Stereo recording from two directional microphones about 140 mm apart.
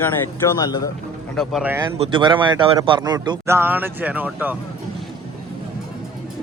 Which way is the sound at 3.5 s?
15° right (ahead or behind).